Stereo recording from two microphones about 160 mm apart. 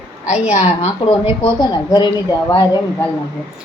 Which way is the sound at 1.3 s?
30° left (ahead or behind).